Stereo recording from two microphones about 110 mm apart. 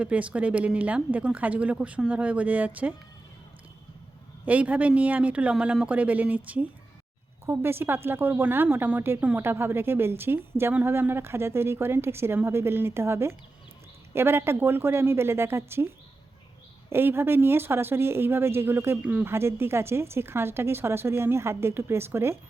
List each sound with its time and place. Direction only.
0.0 s speech: 10° right (ahead or behind)
4.4 s speech: 15° right (ahead or behind)
16.9 s speech: 20° right (ahead or behind)